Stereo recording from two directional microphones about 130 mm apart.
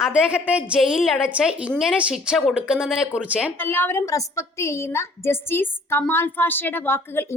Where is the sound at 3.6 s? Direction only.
15° left (ahead or behind).